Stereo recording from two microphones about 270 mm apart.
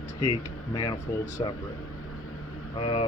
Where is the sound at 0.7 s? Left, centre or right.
Centre.